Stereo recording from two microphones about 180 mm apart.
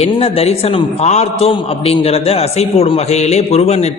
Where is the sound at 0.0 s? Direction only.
35° left (ahead or behind).